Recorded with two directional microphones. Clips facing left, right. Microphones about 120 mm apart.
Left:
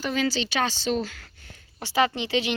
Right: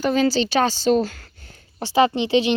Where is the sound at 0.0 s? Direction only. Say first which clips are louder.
Right 7 dB; 35° right (ahead or behind).